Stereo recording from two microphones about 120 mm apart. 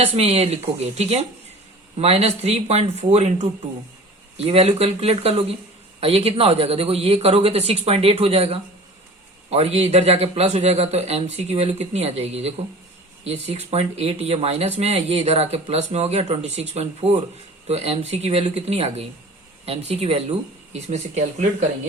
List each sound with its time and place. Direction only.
0.0 s a man's voice: 60° right (ahead or behind)
4.4 s a man's voice: 60° right (ahead or behind)
20.7 s speech: 70° right (ahead or behind)